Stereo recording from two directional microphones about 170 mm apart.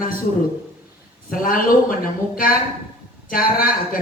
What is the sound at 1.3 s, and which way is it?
Speech, 55° left (ahead or behind).